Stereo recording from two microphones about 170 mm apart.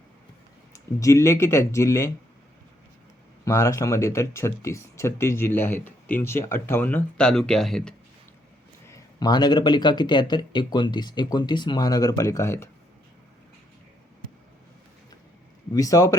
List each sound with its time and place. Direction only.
0.7 s speech: 20° left (ahead or behind)
3.4 s speech: 20° left (ahead or behind); by 7.9 s 5° left (ahead or behind)
8.9 s speech: 20° left (ahead or behind)
15.7 s speech: 20° left (ahead or behind)